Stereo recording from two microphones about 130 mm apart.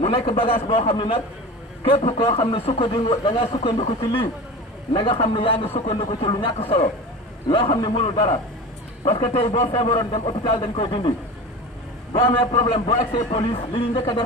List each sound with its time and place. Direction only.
0.0 s a man's voice: 50° left (ahead or behind)
3.4 s a man's voice: 50° left (ahead or behind)
7.7 s speech: 35° left (ahead or behind)
8.0 s speech: 60° left (ahead or behind)
9.7 s a man's voice: 40° left (ahead or behind)